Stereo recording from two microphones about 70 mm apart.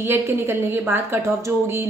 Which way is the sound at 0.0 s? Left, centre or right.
Right.